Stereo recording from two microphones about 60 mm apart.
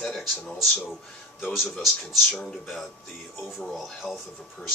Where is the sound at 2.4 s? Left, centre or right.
Centre.